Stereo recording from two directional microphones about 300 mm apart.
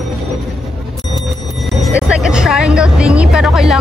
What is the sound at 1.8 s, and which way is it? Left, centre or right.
Speech, centre.